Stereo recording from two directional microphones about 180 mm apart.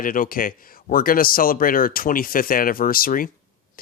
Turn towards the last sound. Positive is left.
turn(degrees=50)  # may be behind; listen again after turning